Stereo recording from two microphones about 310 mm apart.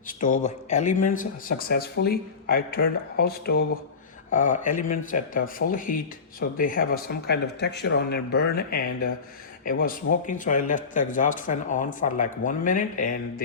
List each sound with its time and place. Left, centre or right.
0.1 s speech: left